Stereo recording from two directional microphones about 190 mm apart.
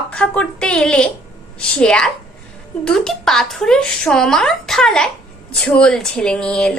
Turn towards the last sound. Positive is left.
turn(degrees=5)  # may be behind; listen again after turning